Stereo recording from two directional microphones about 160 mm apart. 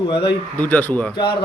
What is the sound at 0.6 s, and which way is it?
Speech, 10° left (ahead or behind).